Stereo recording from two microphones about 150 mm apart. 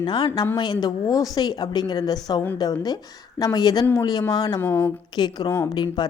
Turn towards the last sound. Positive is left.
turn(degrees=30)  # may be behind; listen again after turning